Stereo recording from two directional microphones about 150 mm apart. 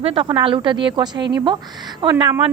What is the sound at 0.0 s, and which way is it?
A woman's voice, 35° right (ahead or behind).